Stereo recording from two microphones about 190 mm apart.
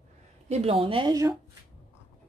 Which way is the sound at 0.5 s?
30° right (ahead or behind).